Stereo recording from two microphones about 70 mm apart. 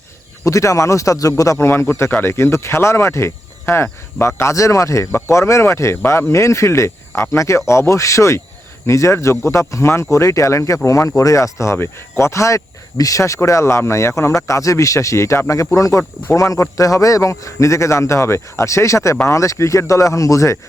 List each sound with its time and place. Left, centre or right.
0.4 s speech: left
1.5 s speech: left